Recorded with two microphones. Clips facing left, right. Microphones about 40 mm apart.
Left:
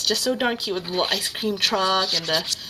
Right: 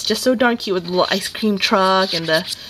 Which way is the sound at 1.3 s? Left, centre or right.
Centre.